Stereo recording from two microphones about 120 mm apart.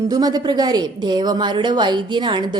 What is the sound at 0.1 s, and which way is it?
A woman's voice, 35° right (ahead or behind).